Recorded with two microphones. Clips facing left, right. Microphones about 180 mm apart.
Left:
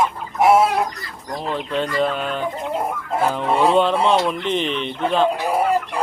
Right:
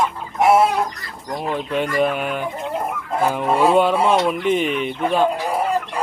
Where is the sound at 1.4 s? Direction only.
15° right (ahead or behind).